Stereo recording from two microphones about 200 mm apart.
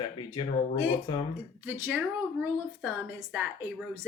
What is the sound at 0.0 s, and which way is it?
Speech, 25° left (ahead or behind).